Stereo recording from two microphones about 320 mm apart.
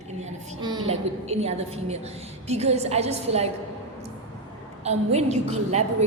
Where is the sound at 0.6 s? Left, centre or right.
Centre.